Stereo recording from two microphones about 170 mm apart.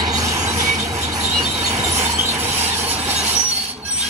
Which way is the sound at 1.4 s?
10° right (ahead or behind).